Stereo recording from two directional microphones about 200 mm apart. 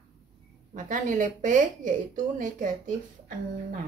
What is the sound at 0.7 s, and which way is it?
Speech, 40° right (ahead or behind).